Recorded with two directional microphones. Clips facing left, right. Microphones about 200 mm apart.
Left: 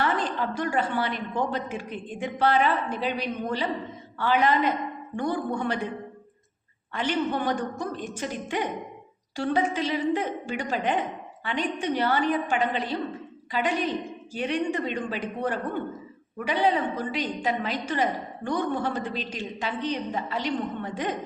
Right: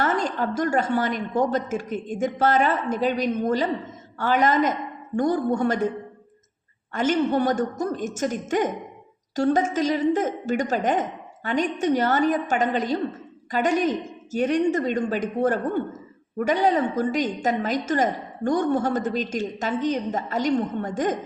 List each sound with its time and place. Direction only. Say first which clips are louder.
0.0 s a woman's voice: right 3 dB; 45° right (ahead or behind)
6.9 s a woman's voice: right 5 dB; 45° right (ahead or behind)